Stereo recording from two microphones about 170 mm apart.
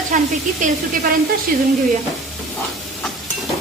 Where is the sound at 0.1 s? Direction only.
50° right (ahead or behind).